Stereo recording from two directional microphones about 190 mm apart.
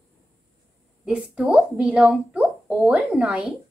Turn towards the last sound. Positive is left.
turn(degrees=-5)  # may be behind; listen again after turning